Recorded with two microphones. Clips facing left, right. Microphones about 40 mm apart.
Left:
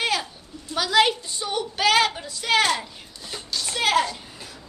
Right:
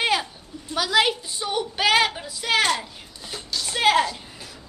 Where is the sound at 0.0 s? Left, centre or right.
Centre.